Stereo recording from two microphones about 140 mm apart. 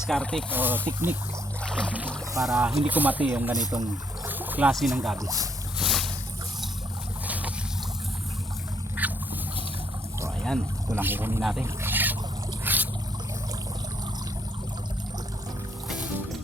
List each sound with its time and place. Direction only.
0.1 s speech: 5° left (ahead or behind)
0.5 s speech: 15° right (ahead or behind)
1.6 s boat: 5° left (ahead or behind)
1.9 s speech: 10° right (ahead or behind)
4.3 s boat: 15° right (ahead or behind)
4.7 s speech: centre (ahead or behind)
5.1 s speech: 25° right (ahead or behind)
5.8 s boat: centre (ahead or behind)
9.0 s vehicle: 10° right (ahead or behind)
10.8 s speech: 15° right (ahead or behind)
11.6 s a sound: 15° right (ahead or behind)
12.6 s trickle: 10° right (ahead or behind)